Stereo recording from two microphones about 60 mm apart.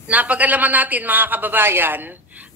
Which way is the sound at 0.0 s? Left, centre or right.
Right.